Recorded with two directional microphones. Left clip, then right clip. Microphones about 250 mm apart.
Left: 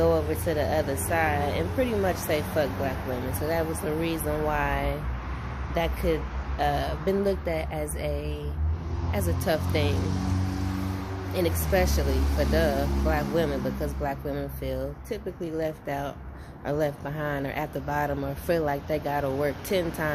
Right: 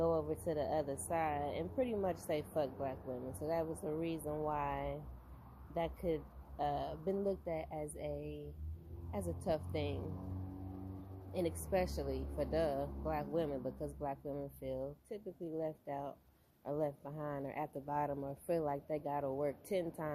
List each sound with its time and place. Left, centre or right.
0.0 s speech: right
11.3 s speech: right